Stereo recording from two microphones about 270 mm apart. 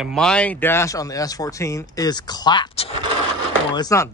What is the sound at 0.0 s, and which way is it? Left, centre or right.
Speech, centre.